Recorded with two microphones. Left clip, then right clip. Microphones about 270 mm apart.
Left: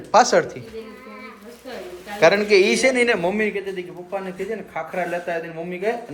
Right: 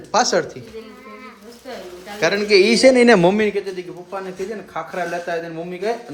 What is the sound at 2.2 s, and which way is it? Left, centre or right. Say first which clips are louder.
A man's voice: even; centre.